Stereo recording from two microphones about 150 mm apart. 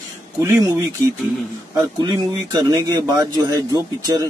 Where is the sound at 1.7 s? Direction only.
25° right (ahead or behind).